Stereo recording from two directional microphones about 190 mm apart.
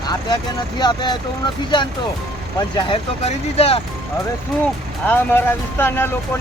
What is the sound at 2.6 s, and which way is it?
Speech, 25° left (ahead or behind).